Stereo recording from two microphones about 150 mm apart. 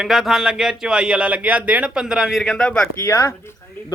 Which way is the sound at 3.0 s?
20° left (ahead or behind).